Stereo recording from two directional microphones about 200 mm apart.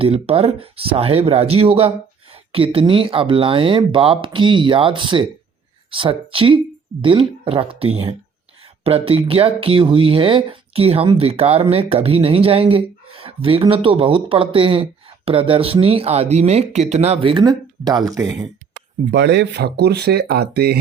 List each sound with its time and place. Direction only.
0.0 s speech: 30° right (ahead or behind)
19.1 s speech: 60° right (ahead or behind)